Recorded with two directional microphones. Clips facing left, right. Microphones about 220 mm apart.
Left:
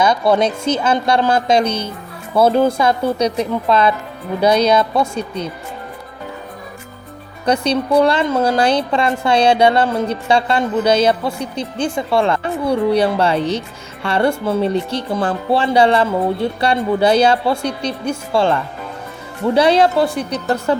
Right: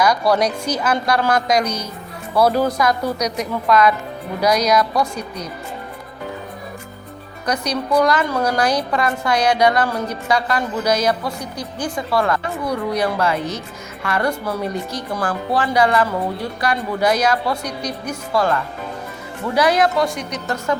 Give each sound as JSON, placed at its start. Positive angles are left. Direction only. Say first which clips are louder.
{"t": 0.0, "sound": "a woman's voice", "louder": "left 2 dB", "side_deg": 25}
{"t": 7.4, "sound": "a woman's voice", "louder": "left 6 dB", "side_deg": 30}